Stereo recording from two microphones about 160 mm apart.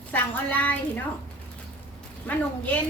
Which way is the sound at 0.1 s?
10° left (ahead or behind).